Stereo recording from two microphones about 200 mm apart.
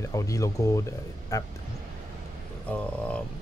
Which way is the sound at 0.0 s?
15° left (ahead or behind).